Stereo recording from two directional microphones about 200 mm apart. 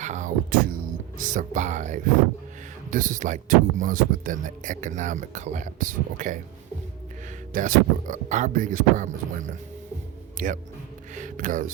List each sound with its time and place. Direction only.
0.0 s music: 35° right (ahead or behind)
1.2 s speech: 40° right (ahead or behind)
7.5 s speech: 40° right (ahead or behind)